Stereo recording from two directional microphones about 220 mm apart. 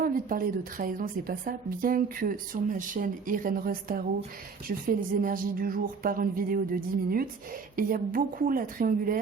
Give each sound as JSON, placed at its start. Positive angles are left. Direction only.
{"t": 0.0, "sound": "a woman's voice", "side_deg": -40}